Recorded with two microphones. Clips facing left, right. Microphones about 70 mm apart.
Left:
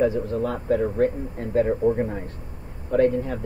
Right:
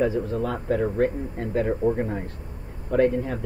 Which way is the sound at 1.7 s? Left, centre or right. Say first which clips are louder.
Even; centre.